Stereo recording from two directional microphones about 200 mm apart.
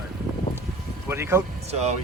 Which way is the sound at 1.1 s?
15° right (ahead or behind).